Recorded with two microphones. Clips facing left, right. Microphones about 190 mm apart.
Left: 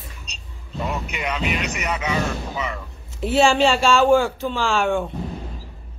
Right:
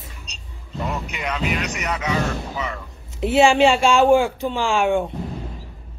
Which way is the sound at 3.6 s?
15° right (ahead or behind).